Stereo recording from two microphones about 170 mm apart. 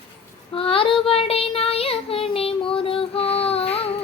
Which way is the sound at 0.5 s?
35° left (ahead or behind).